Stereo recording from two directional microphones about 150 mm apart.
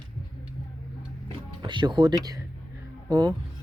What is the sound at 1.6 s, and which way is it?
Speech, 30° right (ahead or behind).